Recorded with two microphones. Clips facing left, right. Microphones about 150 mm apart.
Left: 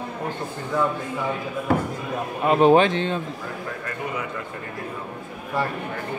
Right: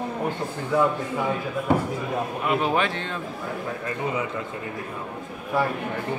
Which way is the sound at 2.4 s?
35° left (ahead or behind).